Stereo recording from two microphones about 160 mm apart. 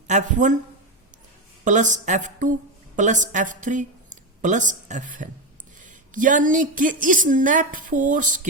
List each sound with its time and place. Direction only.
0.1 s speech: 50° right (ahead or behind)
1.6 s a woman's voice: 50° right (ahead or behind)